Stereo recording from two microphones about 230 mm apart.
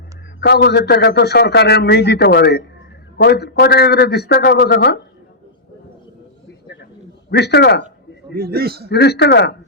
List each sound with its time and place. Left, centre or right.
0.3 s a man's voice: left
7.3 s a man's voice: left
8.4 s a man's voice: right
8.9 s a man's voice: left